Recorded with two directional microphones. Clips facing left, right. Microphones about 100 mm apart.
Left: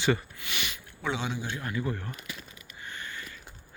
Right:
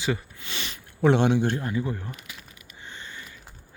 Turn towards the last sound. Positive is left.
turn(degrees=-20)  # may be behind; listen again after turning